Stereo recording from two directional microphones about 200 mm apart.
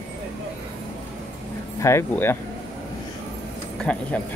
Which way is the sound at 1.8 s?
15° left (ahead or behind).